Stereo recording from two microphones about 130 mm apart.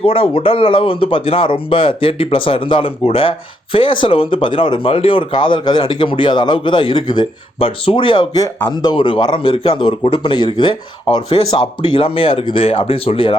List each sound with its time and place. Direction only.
0.0 s a man's voice: 45° left (ahead or behind)